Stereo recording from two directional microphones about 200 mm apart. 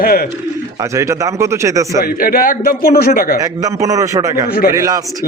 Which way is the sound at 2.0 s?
45° left (ahead or behind).